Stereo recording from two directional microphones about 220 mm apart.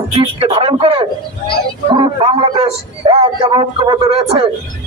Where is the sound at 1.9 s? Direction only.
20° right (ahead or behind).